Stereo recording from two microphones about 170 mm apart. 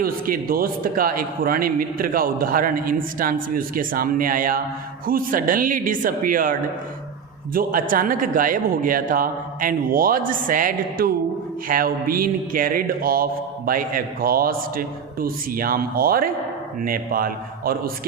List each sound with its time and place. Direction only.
0.0 s a man's voice: 60° right (ahead or behind)